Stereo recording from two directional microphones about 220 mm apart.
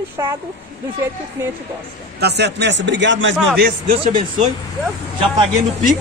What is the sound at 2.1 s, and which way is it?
A man's voice, 50° right (ahead or behind).